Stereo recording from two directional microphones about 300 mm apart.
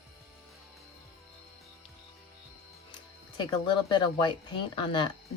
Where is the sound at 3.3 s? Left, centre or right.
Centre.